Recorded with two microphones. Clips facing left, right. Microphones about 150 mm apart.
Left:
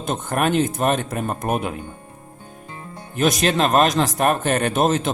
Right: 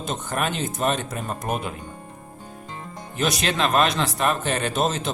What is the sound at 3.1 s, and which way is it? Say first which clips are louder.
Speech: left 5 dB; 45° left (ahead or behind).